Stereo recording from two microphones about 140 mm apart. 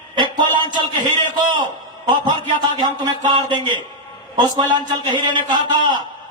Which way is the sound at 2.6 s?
30° right (ahead or behind).